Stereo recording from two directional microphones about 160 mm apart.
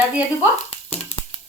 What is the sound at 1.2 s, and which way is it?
Music, 20° left (ahead or behind).